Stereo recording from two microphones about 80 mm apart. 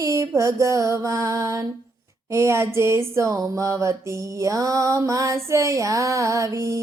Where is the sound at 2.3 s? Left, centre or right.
Right.